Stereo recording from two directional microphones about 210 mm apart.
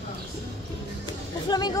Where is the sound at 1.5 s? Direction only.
20° left (ahead or behind).